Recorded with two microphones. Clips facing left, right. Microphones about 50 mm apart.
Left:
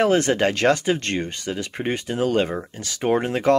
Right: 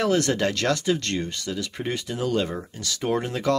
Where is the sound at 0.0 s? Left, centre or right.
Left.